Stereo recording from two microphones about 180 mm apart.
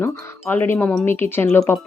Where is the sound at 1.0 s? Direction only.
15° left (ahead or behind).